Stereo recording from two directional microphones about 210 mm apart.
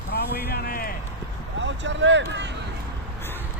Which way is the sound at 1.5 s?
60° right (ahead or behind).